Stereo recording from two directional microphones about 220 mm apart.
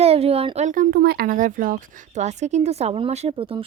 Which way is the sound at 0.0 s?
25° right (ahead or behind).